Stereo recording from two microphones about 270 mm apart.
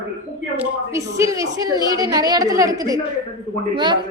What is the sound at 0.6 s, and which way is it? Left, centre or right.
A woman's voice, centre.